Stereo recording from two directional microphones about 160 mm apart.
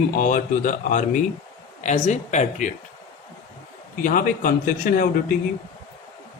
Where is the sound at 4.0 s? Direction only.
60° left (ahead or behind).